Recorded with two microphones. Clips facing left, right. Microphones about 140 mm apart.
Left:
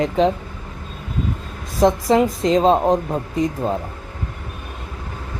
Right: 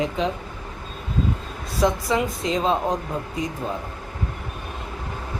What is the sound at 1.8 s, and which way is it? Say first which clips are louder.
Speech: left 6 dB; 45° left (ahead or behind).